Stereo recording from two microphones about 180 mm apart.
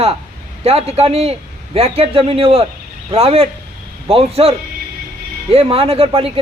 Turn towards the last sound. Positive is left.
turn(degrees=-30)  # may be behind; listen again after turning